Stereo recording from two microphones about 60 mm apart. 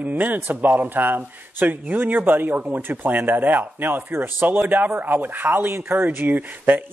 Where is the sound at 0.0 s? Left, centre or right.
Right.